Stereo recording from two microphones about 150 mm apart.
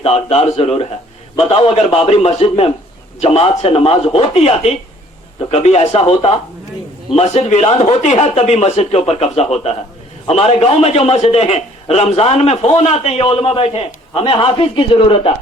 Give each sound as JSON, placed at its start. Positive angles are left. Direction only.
{"t": 0.0, "sound": "a man's voice", "side_deg": 40}